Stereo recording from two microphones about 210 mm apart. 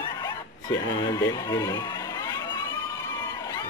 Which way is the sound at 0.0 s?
20° left (ahead or behind).